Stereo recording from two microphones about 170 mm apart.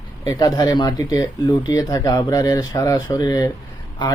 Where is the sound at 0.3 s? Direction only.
20° left (ahead or behind).